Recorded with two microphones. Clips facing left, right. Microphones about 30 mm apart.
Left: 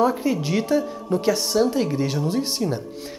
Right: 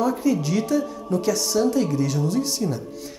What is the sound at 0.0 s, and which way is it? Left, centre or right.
A woman's voice, left.